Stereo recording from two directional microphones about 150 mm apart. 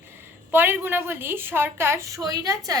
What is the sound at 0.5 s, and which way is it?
A woman's voice, 15° right (ahead or behind).